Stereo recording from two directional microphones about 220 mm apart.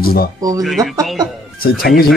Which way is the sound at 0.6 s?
Centre (ahead or behind).